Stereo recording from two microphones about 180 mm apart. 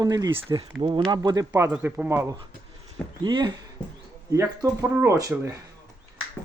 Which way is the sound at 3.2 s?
25° right (ahead or behind).